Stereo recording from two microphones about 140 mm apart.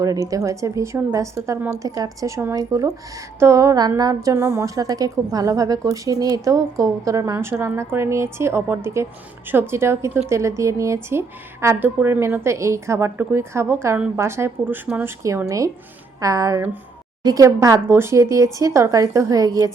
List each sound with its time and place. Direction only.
0.0 s a woman's voice: 25° right (ahead or behind)